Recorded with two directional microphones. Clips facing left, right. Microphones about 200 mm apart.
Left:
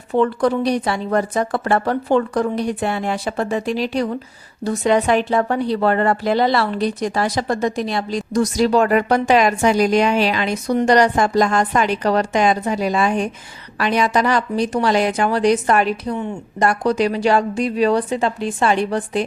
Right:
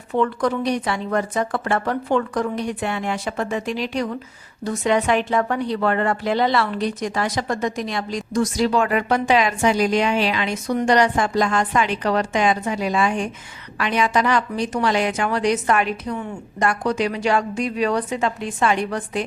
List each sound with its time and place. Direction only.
0.1 s speech: 35° left (ahead or behind)